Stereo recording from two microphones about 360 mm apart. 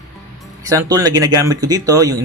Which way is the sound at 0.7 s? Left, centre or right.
Centre.